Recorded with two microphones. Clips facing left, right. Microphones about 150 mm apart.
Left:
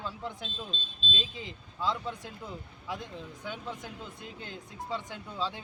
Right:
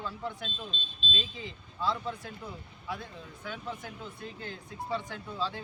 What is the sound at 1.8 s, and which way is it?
Speech, 15° left (ahead or behind).